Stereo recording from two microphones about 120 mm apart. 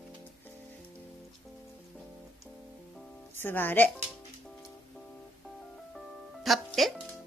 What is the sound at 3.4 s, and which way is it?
Speech, 15° left (ahead or behind).